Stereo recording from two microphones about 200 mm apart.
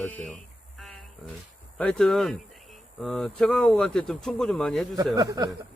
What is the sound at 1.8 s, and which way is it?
Speech, 5° left (ahead or behind).